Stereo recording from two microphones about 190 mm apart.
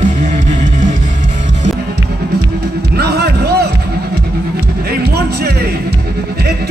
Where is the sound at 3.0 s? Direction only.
60° right (ahead or behind).